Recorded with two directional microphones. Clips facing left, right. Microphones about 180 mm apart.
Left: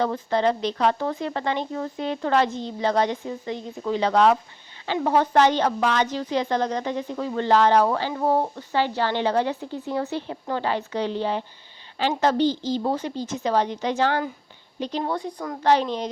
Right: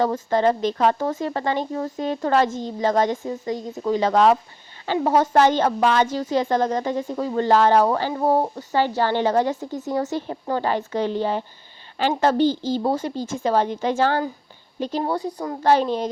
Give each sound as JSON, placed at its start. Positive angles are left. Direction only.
{"t": 0.0, "sound": "speech", "side_deg": -45}